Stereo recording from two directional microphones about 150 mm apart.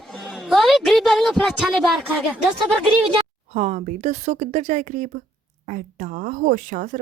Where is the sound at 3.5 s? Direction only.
50° right (ahead or behind).